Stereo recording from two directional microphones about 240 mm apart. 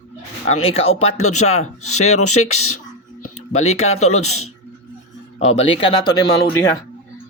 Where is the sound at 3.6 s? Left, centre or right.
Left.